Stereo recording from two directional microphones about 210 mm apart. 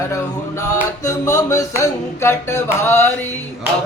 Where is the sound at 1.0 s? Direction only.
15° left (ahead or behind).